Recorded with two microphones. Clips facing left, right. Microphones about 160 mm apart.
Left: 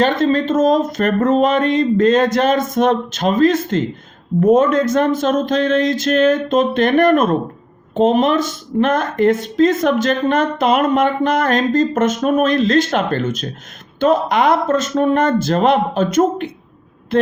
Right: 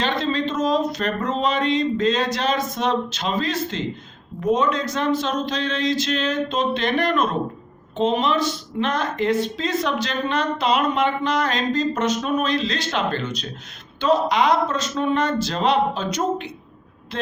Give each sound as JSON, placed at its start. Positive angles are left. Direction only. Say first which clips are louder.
{"t": 0.0, "sound": "speech", "louder": "left 8 dB", "side_deg": 50}